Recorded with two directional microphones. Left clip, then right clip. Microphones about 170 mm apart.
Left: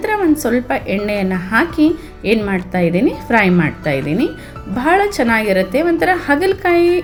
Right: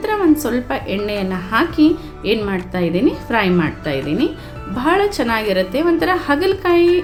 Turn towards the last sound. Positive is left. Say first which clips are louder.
# left 1 dB
turn(degrees=15)  # may be behind; listen again after turning